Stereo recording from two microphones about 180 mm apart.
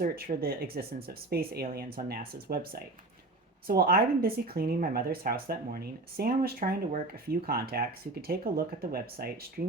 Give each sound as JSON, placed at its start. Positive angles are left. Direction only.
{"t": 0.4, "sound": "speech", "side_deg": -55}